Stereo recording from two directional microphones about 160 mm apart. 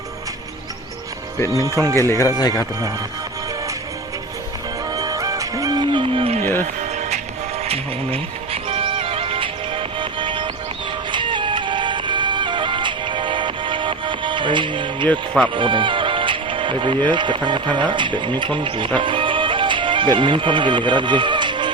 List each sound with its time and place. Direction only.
1.5 s speech: 20° right (ahead or behind)
2.0 s speech: 20° left (ahead or behind)
4.9 s music: 25° right (ahead or behind); by 6.5 s 40° right (ahead or behind)
7.6 s speech: 40° right (ahead or behind)
8.7 s music: 35° right (ahead or behind)
15.0 s speech: 10° left (ahead or behind)
15.5 s music: 30° right (ahead or behind)
17.1 s speech: 30° right (ahead or behind)